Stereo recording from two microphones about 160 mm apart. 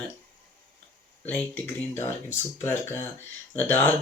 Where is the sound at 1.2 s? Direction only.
10° left (ahead or behind).